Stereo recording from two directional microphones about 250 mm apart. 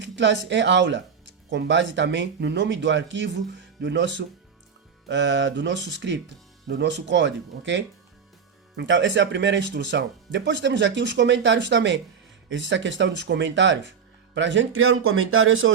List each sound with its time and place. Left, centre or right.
0.0 s speech: right